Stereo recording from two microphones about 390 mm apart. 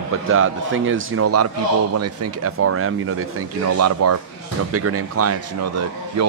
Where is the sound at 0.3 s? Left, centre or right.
Right.